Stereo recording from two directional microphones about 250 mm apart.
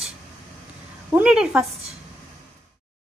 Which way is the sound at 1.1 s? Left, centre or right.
Centre.